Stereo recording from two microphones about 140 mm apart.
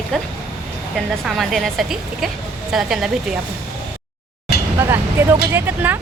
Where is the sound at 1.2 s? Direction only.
Centre (ahead or behind).